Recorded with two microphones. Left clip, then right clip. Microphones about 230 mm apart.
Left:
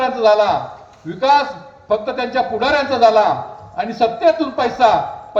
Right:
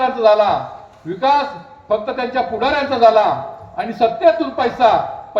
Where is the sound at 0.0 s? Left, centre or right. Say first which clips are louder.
Right 1 dB; left.